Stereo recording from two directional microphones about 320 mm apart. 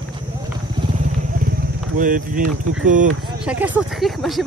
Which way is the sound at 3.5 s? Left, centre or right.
Centre.